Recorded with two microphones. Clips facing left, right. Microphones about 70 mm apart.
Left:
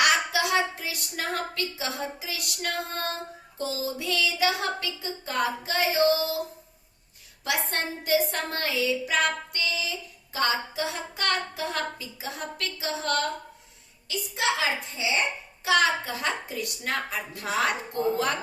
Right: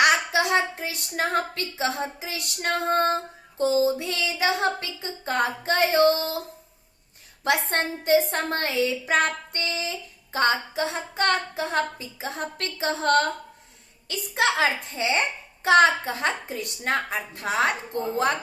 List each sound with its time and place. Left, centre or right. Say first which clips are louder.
0.0 s a woman's voice: right 3 dB; right
7.4 s a woman's voice: right 5 dB; right